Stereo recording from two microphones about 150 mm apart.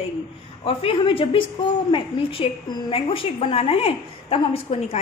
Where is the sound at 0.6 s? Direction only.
35° left (ahead or behind).